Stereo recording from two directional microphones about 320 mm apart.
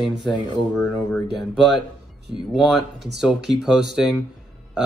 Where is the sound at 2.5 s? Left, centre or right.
Centre.